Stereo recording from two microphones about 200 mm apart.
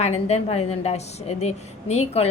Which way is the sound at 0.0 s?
35° left (ahead or behind).